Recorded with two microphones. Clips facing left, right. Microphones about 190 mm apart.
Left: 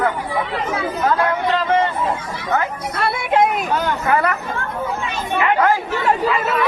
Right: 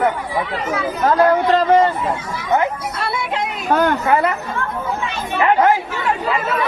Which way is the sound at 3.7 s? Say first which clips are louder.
Right 5 dB; 55° right (ahead or behind).